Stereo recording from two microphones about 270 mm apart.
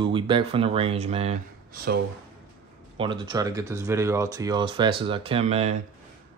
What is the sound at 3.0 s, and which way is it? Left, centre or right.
Speech, centre.